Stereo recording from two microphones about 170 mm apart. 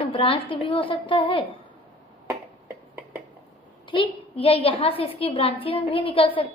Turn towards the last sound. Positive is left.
turn(degrees=30)  # may be behind; listen again after turning